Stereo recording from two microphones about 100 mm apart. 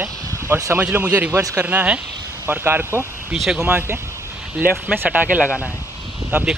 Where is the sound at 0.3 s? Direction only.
30° right (ahead or behind).